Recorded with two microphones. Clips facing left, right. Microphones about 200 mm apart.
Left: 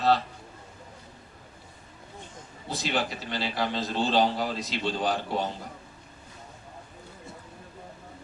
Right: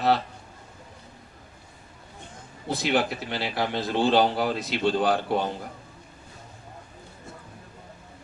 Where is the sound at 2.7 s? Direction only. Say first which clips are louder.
Right 5 dB; 60° right (ahead or behind).